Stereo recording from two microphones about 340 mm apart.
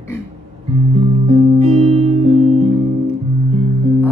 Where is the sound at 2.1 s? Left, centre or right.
Centre.